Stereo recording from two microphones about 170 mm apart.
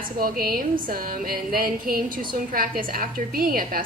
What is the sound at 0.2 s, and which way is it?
A woman's voice, 60° right (ahead or behind).